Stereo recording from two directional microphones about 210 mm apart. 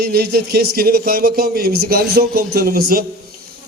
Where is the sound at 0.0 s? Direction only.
50° right (ahead or behind).